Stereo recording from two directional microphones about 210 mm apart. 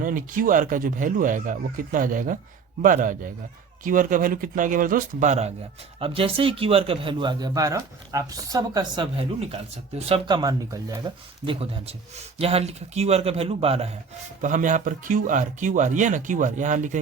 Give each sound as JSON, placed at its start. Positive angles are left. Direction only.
{"t": 0.0, "sound": "speech", "side_deg": -40}